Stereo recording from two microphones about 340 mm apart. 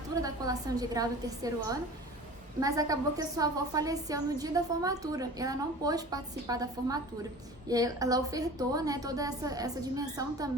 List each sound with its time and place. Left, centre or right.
0.2 s a woman's voice: centre